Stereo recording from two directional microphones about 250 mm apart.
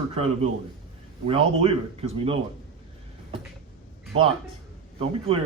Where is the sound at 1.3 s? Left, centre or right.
Right.